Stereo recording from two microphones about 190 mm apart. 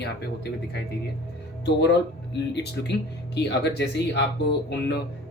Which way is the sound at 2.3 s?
60° left (ahead or behind).